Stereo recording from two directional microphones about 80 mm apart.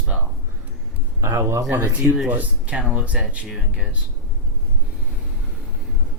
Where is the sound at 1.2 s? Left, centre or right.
Right.